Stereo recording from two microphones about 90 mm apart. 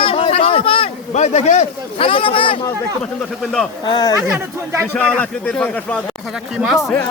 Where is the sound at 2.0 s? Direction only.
80° left.